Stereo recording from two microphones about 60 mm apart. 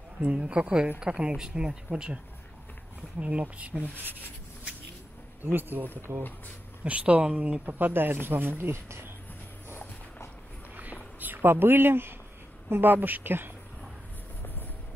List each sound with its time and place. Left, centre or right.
0.2 s speech: centre
3.2 s speech: right
3.8 s speech: right
5.4 s speech: right
6.8 s speech: right
7.8 s speech: right
8.7 s speech: right
9.8 s clip-clop: left
11.1 s speech: right